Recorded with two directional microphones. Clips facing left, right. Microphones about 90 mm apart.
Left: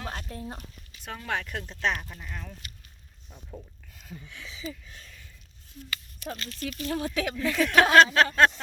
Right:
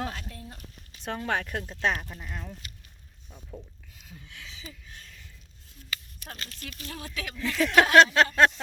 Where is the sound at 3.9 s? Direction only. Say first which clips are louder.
Left 8 dB; 50° left (ahead or behind).